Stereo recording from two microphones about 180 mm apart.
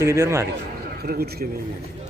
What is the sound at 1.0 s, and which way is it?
Speech, 60° right (ahead or behind).